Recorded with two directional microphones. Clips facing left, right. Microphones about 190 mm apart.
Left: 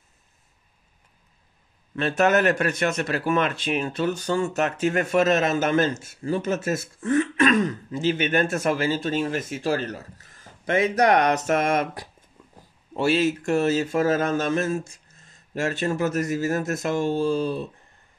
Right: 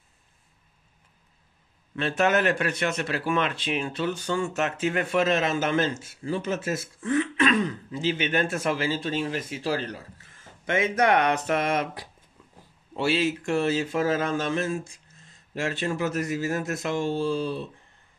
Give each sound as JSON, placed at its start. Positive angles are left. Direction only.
{"t": 2.0, "sound": "speech", "side_deg": 45}